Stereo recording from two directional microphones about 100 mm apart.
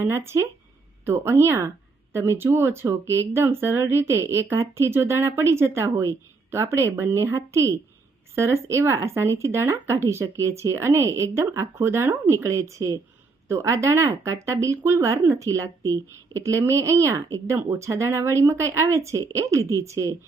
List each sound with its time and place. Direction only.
0.0 s speech: 25° right (ahead or behind)